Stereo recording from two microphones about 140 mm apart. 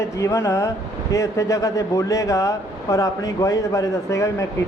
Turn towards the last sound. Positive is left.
turn(degrees=20)  # may be behind; listen again after turning